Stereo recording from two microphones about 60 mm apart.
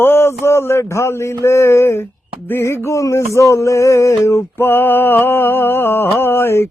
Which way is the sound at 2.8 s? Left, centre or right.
Left.